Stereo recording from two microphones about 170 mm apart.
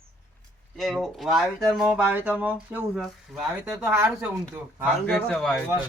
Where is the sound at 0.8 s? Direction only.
Centre (ahead or behind).